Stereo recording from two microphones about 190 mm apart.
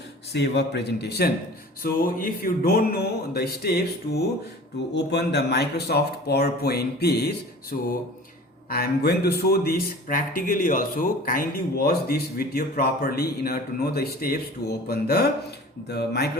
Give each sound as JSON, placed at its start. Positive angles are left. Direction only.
{"t": 0.3, "sound": "speech", "side_deg": 60}
{"t": 1.8, "sound": "speech", "side_deg": 45}